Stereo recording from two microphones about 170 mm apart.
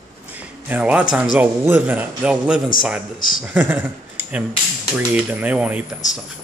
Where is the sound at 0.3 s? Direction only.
10° right (ahead or behind).